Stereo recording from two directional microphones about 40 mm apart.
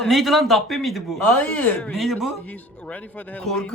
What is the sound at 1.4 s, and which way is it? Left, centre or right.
Speech, left.